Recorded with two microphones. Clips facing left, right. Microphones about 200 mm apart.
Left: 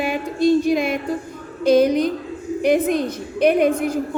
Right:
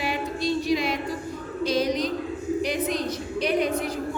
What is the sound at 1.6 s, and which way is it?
A woman's voice, 55° left (ahead or behind).